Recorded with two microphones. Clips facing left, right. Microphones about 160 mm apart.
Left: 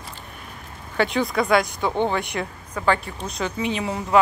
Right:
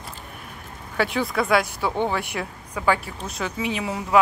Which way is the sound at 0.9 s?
5° right (ahead or behind).